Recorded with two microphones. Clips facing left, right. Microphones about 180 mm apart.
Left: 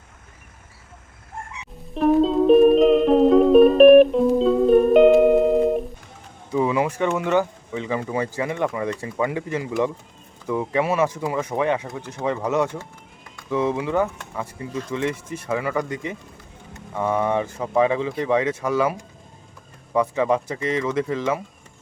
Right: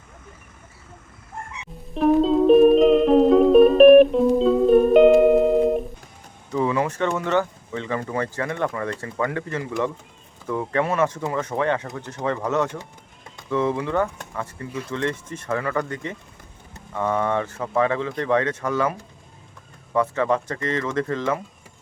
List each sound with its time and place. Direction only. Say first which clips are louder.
1.9 s music: even; centre (ahead or behind)
6.5 s speech: left 1 dB; 15° left (ahead or behind)